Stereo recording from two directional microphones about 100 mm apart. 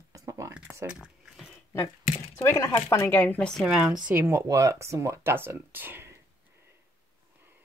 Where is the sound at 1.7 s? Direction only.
30° left (ahead or behind).